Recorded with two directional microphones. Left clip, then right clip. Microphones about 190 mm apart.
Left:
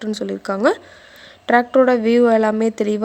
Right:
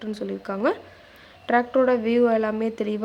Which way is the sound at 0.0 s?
40° left (ahead or behind).